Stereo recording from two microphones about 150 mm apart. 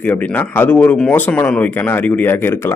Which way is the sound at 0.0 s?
10° left (ahead or behind).